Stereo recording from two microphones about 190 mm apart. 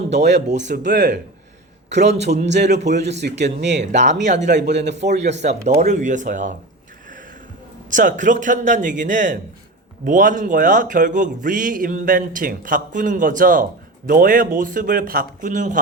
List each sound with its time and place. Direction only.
0.1 s speech: 65° right (ahead or behind)
0.4 s speech: 40° right (ahead or behind)
2.6 s speech: 60° right (ahead or behind)
3.9 s speech: 40° right (ahead or behind)
4.7 s speech: 65° right (ahead or behind)
4.9 s speech: 35° right (ahead or behind)
7.9 s speech: 40° right (ahead or behind)